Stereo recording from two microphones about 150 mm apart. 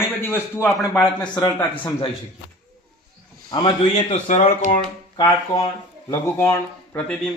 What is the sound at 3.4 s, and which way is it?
Speech, 30° left (ahead or behind).